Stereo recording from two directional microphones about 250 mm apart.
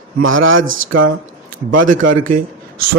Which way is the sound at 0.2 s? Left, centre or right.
Right.